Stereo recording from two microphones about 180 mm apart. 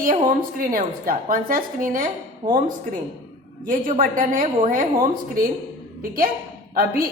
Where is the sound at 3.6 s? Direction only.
45° right (ahead or behind).